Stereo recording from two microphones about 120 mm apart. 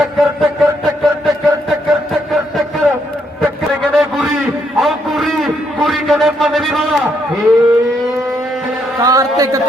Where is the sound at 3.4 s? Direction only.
Centre (ahead or behind).